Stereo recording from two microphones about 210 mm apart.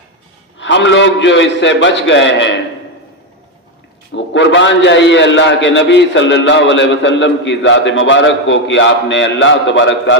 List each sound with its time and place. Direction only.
0.6 s a man's voice: 60° left (ahead or behind)
4.1 s a man's voice: 60° left (ahead or behind)